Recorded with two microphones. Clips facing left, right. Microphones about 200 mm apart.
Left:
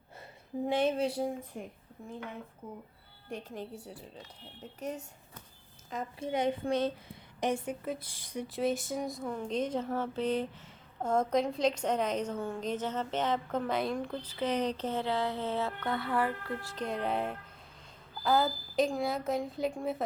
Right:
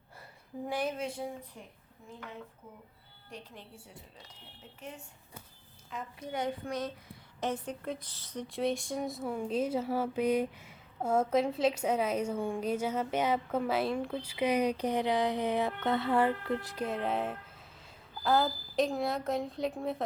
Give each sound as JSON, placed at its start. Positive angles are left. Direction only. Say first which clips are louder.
{"t": 0.6, "sound": "a woman's voice", "louder": "left 5 dB", "side_deg": 25}
{"t": 3.2, "sound": "a woman's voice", "louder": "left 8 dB", "side_deg": 50}
{"t": 6.1, "sound": "a woman's voice", "louder": "left 4 dB", "side_deg": 25}
{"t": 7.3, "sound": "a woman's voice", "louder": "left 3 dB", "side_deg": 15}
{"t": 8.5, "sound": "speech", "louder": "even", "side_deg": 0}
{"t": 16.7, "sound": "a woman's voice", "louder": "left 4 dB", "side_deg": -5}